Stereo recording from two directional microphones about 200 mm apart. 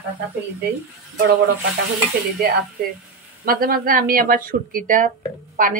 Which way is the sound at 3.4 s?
45° right (ahead or behind).